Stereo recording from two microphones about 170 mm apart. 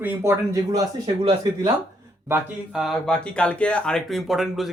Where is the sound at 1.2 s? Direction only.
35° right (ahead or behind).